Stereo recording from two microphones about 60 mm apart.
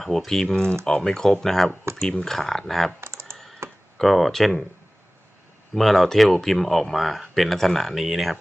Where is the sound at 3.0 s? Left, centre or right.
Right.